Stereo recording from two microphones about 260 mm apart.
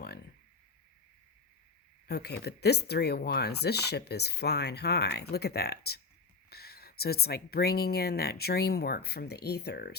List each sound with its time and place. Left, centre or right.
2.0 s speech: left